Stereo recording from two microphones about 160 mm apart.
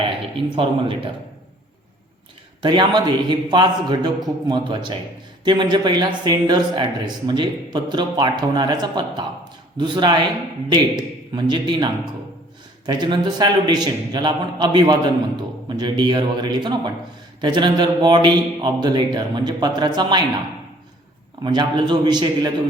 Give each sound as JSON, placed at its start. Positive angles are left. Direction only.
{"t": 0.5, "sound": "speech", "side_deg": -35}
{"t": 2.6, "sound": "a man's voice", "side_deg": -25}
{"t": 21.4, "sound": "a man's voice", "side_deg": -30}